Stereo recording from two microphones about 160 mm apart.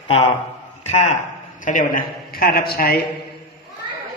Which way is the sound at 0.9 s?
45° left (ahead or behind).